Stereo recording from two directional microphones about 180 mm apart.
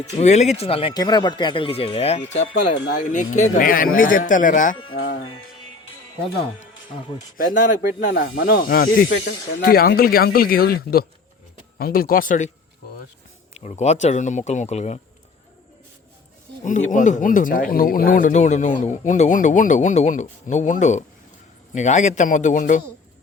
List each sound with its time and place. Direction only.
0.0 s speech: 40° left (ahead or behind)
4.9 s speech: 90° left
7.3 s speech: 50° left (ahead or behind)
13.5 s speech: 40° left (ahead or behind)
16.6 s speech: 45° left (ahead or behind)